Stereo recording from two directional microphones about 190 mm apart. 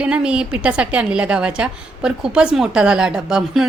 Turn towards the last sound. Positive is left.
turn(degrees=0)  # may be behind; listen again after turning